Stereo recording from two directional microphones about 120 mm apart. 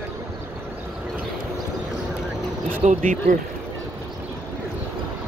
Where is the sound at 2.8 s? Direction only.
70° right (ahead or behind).